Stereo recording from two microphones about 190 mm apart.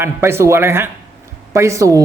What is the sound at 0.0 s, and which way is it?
Speech, 15° right (ahead or behind).